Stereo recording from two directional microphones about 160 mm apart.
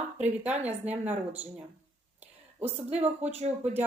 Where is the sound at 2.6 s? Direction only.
10° right (ahead or behind).